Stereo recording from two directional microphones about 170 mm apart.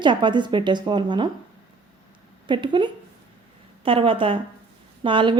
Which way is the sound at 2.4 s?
30° right (ahead or behind).